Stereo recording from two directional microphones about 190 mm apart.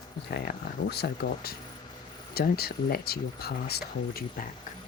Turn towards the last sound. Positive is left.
turn(degrees=55)  # may be behind; listen again after turning